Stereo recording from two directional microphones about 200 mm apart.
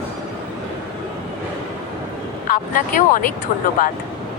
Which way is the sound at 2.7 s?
45° left (ahead or behind).